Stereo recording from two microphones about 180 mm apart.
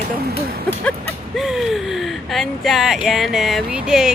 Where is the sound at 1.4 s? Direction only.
Centre (ahead or behind).